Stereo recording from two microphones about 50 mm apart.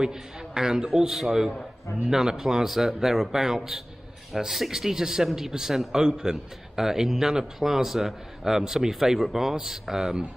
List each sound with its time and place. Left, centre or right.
0.0 s a man's voice: centre